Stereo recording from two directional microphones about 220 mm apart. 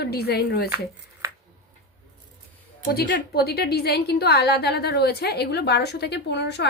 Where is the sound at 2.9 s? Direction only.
45° left (ahead or behind).